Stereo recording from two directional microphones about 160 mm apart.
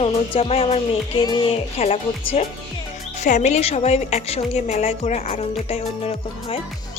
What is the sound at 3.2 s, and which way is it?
Speech, 45° left (ahead or behind).